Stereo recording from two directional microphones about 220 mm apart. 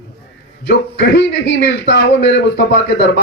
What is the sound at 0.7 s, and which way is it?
A man's voice, 50° left (ahead or behind).